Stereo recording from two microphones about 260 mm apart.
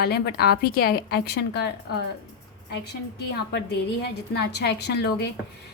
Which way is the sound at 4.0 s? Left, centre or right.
Left.